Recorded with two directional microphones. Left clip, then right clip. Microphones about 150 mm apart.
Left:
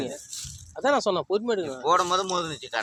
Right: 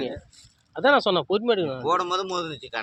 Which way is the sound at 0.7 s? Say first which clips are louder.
Right 4 dB; 55° right (ahead or behind).